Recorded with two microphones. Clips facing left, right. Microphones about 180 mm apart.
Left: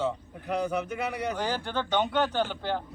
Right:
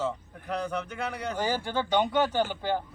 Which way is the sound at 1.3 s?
10° right (ahead or behind).